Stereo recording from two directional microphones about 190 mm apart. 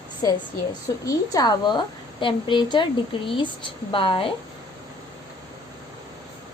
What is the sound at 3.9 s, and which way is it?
Speech, 25° left (ahead or behind).